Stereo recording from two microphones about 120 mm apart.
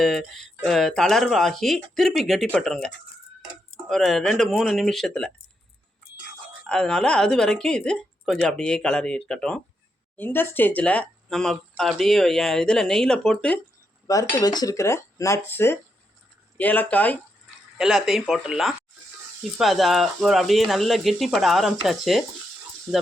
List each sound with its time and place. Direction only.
0.0 s speech: centre (ahead or behind)
6.7 s speech: 5° left (ahead or behind)
10.2 s speech: 15° left (ahead or behind)
14.1 s speech: 30° left (ahead or behind); by 17.2 s 15° left (ahead or behind)
17.7 s speech: centre (ahead or behind)